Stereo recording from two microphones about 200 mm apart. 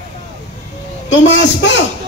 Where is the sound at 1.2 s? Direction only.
65° left (ahead or behind).